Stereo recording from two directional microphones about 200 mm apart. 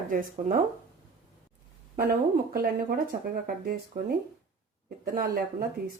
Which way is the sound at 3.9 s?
50° right (ahead or behind).